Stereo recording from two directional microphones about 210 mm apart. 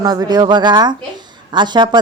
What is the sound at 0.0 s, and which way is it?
Speech, 20° right (ahead or behind).